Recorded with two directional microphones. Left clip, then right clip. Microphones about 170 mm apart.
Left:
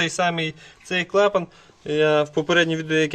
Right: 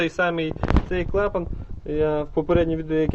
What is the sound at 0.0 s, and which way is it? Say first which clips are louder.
Speech: left 1 dB; 15° left (ahead or behind).